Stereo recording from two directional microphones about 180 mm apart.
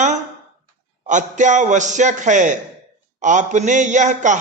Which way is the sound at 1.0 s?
45° right (ahead or behind).